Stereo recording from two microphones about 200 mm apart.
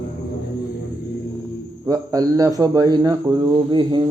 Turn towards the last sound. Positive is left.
turn(degrees=-20)  # may be behind; listen again after turning